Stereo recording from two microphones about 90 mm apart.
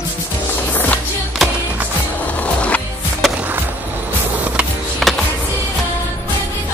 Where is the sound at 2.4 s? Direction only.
15° left (ahead or behind).